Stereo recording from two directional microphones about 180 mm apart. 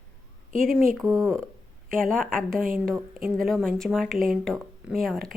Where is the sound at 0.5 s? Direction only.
50° right (ahead or behind).